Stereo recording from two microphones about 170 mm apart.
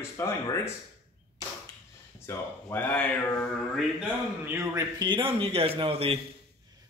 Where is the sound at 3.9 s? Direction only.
10° right (ahead or behind); by 6.2 s 35° right (ahead or behind).